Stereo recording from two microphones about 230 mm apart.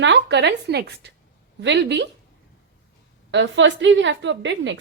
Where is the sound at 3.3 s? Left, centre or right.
Right.